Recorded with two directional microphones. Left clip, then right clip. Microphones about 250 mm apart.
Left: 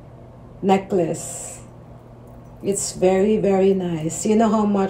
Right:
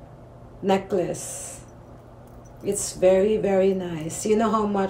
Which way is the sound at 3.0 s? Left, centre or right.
Centre.